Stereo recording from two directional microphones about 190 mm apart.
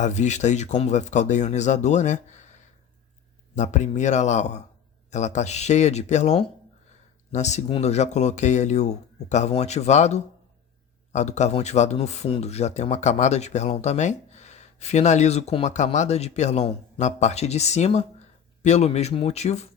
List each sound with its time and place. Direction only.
0.0 s speech: 40° left (ahead or behind)